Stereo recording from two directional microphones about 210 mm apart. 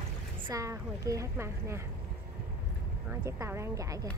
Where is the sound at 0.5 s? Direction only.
15° right (ahead or behind).